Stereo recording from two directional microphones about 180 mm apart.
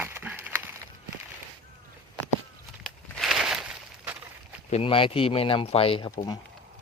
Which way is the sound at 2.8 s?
Centre (ahead or behind).